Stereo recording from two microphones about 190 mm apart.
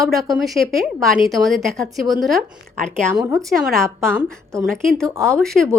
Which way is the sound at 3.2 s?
15° right (ahead or behind).